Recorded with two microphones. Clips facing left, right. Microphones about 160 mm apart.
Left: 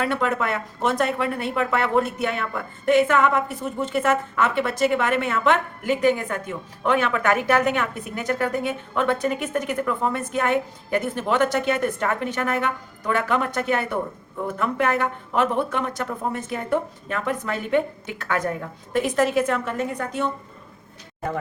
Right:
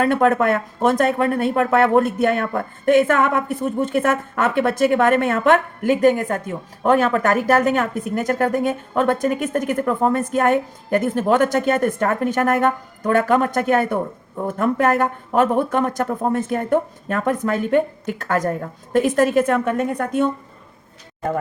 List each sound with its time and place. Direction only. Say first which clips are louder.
0.0 s speech: right 7 dB; 50° right (ahead or behind)